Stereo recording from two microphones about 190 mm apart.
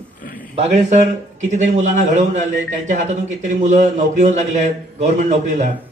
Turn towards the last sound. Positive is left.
turn(degrees=-40)  # may be behind; listen again after turning